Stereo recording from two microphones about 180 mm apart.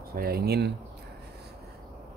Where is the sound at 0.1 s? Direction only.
60° right (ahead or behind).